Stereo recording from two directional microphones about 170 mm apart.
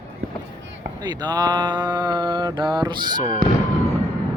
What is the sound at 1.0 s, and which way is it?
Mantra, 25° right (ahead or behind).